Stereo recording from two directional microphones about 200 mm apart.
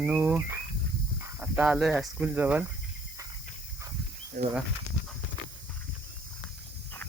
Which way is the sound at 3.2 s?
15° right (ahead or behind).